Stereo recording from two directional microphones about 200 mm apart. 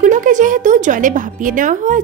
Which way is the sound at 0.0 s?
40° right (ahead or behind).